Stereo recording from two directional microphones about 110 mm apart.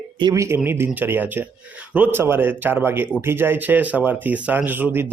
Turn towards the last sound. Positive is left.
turn(degrees=-20)  # may be behind; listen again after turning